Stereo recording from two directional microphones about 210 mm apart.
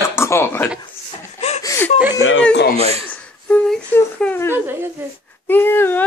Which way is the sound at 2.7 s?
30° right (ahead or behind).